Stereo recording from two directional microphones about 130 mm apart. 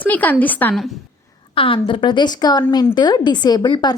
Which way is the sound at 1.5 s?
40° left (ahead or behind).